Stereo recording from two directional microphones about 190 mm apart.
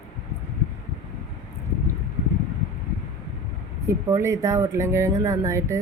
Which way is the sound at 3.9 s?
15° right (ahead or behind).